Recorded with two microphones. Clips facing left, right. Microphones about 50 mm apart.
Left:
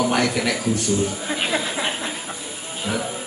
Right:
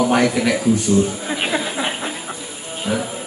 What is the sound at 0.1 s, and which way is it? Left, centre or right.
Speech, centre.